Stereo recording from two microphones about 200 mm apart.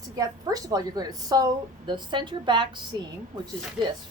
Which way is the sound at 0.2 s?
15° right (ahead or behind).